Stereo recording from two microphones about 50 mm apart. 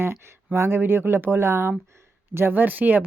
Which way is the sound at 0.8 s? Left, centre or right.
Right.